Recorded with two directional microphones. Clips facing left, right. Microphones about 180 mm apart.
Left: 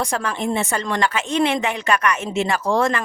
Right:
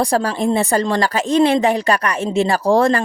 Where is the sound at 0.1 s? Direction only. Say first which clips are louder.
Right 6 dB; 35° right (ahead or behind).